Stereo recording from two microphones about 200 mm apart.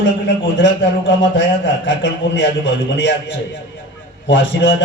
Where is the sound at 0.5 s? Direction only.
65° left (ahead or behind).